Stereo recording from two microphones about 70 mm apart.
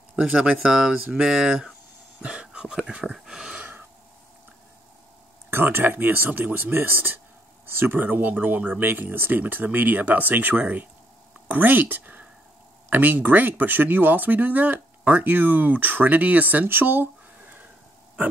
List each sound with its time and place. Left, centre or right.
0.1 s speech: centre
3.5 s breathing: right
5.5 s speech: right